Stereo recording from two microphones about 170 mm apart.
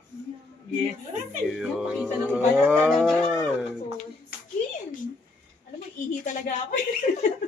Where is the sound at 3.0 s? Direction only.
5° left (ahead or behind).